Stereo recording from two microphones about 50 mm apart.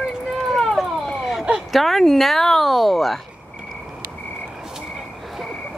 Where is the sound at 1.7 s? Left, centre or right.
Centre.